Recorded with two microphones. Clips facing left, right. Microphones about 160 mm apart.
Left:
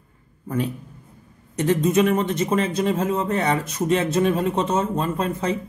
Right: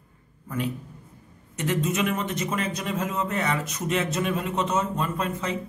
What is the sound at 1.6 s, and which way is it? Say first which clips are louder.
Speech: left 7 dB; 30° left (ahead or behind).